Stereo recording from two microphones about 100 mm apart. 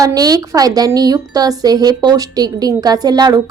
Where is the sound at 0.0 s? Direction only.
40° right (ahead or behind).